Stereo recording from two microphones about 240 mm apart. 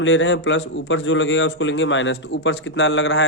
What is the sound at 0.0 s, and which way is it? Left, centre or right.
A man's voice, left.